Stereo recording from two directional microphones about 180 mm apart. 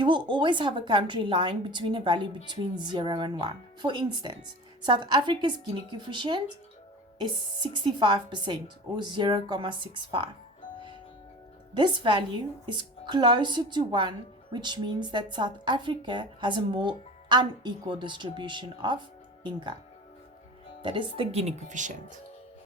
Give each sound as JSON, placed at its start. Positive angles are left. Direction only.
{"t": 0.0, "sound": "speech", "side_deg": -25}
{"t": 7.9, "sound": "speech", "side_deg": -25}
{"t": 11.7, "sound": "speech", "side_deg": -25}
{"t": 20.8, "sound": "speech", "side_deg": -25}